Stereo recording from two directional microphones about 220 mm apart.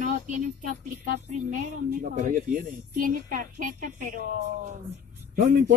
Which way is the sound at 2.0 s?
40° right (ahead or behind).